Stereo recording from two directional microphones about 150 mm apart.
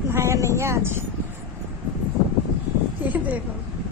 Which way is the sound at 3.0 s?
10° right (ahead or behind).